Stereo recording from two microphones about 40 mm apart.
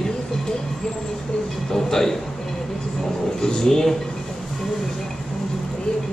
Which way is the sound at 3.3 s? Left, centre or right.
Centre.